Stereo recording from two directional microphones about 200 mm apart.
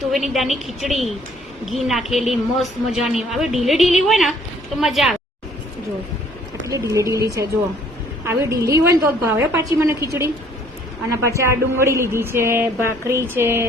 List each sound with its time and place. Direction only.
0.1 s a woman's voice: centre (ahead or behind)
6.7 s a woman's voice: 15° right (ahead or behind)
8.2 s a woman's voice: 15° right (ahead or behind)
11.3 s a woman's voice: 15° right (ahead or behind)